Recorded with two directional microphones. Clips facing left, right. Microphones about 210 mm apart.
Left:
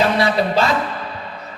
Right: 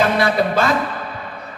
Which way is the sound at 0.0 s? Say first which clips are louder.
Even; 50° right (ahead or behind).